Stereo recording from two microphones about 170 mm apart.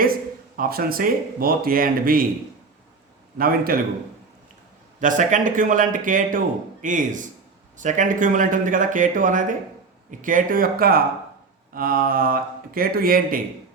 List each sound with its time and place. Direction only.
0.5 s speech: 55° right (ahead or behind)
3.3 s speech: 60° right (ahead or behind)
4.9 s speech: 50° right (ahead or behind)